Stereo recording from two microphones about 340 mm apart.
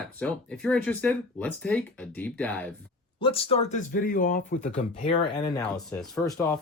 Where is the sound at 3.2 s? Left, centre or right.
Centre.